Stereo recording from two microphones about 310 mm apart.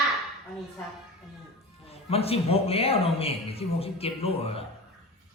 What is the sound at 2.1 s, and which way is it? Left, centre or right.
A man's voice, centre.